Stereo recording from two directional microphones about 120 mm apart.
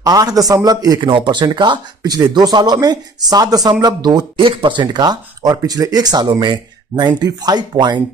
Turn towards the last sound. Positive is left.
turn(degrees=-35)  # may be behind; listen again after turning